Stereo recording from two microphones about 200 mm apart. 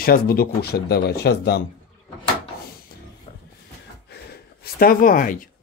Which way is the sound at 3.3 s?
30° left (ahead or behind).